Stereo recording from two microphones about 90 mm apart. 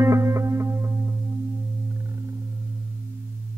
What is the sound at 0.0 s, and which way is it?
Music, 35° right (ahead or behind).